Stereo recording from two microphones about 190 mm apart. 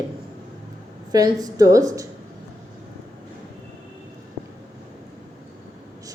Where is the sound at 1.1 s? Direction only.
20° right (ahead or behind).